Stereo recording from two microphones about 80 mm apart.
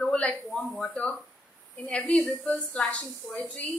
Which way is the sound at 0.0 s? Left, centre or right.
Centre.